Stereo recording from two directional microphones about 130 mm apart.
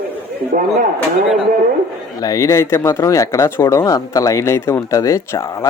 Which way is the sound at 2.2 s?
25° left (ahead or behind).